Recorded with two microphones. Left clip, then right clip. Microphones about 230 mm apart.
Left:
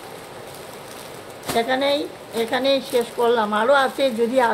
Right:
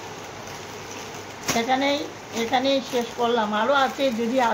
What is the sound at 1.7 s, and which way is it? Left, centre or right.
Speech, left.